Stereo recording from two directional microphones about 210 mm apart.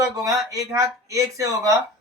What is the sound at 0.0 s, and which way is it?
Speech, 15° right (ahead or behind).